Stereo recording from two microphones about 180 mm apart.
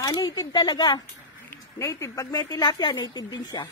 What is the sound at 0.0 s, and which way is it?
Speech, 20° left (ahead or behind).